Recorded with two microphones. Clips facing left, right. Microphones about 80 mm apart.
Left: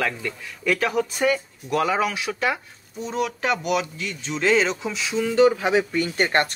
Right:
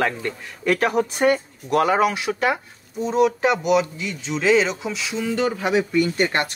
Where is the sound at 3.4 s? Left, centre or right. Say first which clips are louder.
Right 5 dB; centre.